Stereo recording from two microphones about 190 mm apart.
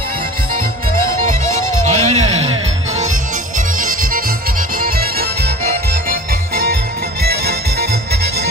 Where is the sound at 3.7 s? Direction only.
45° right (ahead or behind).